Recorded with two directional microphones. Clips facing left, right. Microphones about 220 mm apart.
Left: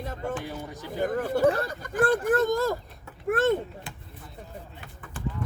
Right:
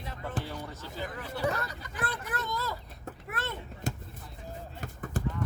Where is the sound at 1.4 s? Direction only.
30° left (ahead or behind).